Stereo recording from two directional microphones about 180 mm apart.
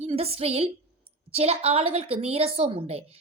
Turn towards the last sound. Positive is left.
turn(degrees=-35)  # may be behind; listen again after turning